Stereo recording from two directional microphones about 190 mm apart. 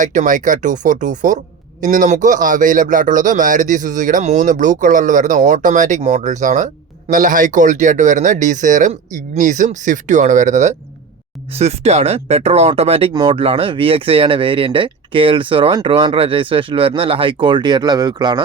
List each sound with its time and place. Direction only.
0.0 s a man's voice: 40° right (ahead or behind); by 18.4 s 25° right (ahead or behind)